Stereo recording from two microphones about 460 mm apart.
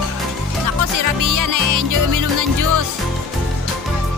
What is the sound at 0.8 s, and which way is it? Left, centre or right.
Music, right.